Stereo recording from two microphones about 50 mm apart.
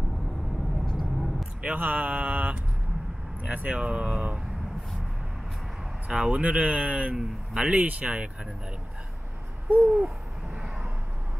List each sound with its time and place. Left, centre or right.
0.8 s vehicle: centre
1.6 s speech: right
6.0 s speech: right
9.7 s speech: right